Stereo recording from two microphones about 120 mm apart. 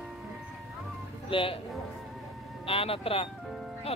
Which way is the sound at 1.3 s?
50° left (ahead or behind).